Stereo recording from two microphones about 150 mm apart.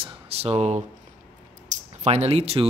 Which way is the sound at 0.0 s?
40° right (ahead or behind).